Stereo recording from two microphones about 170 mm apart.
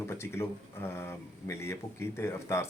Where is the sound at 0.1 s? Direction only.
15° left (ahead or behind).